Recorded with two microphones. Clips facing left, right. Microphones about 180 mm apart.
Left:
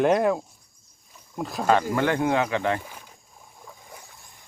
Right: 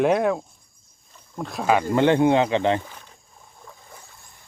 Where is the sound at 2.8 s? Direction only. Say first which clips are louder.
Even; 10° left (ahead or behind).